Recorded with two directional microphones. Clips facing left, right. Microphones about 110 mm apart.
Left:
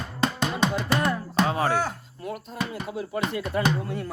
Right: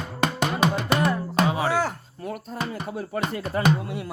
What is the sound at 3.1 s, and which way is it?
Speech, 40° right (ahead or behind).